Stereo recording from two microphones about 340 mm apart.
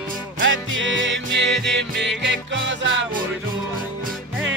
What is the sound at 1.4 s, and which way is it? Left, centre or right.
Music, centre.